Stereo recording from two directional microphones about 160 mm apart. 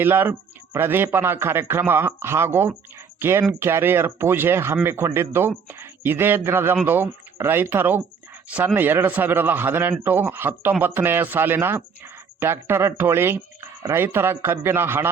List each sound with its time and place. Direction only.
0.0 s a man's voice: 15° right (ahead or behind)